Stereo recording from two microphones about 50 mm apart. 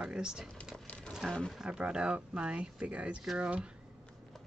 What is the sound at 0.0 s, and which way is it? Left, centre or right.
Speech, centre.